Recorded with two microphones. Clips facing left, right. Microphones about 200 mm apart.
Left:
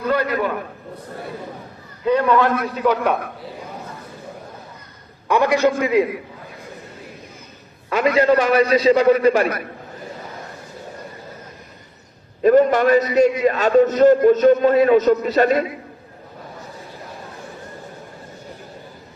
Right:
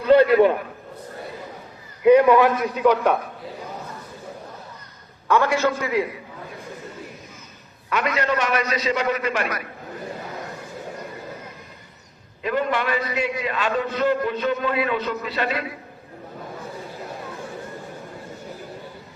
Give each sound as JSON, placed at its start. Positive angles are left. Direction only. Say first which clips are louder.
{"t": 0.1, "sound": "a man's voice", "louder": "right 8 dB", "side_deg": -25}
{"t": 2.0, "sound": "a man's voice", "louder": "right 3 dB", "side_deg": -10}
{"t": 2.9, "sound": "a man's voice", "louder": "even", "side_deg": 10}
{"t": 5.3, "sound": "a man's voice", "louder": "left 3 dB", "side_deg": 15}
{"t": 7.9, "sound": "a man's voice", "louder": "left 7 dB", "side_deg": 30}
{"t": 12.4, "sound": "a man's voice", "louder": "left 10 dB", "side_deg": 45}